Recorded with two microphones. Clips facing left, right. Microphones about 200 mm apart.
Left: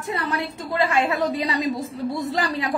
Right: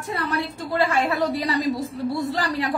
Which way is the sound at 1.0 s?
15° left (ahead or behind).